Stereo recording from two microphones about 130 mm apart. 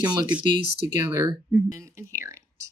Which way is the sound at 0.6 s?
70° left (ahead or behind).